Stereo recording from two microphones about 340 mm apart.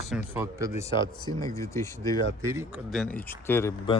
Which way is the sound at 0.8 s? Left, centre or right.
Centre.